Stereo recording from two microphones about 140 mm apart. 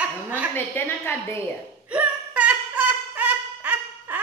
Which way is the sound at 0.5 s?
15° left (ahead or behind).